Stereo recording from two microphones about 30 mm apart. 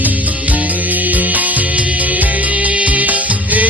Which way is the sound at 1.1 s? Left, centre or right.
Right.